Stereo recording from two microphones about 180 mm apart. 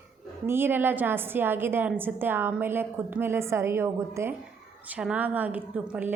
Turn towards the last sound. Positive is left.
turn(degrees=-10)  # may be behind; listen again after turning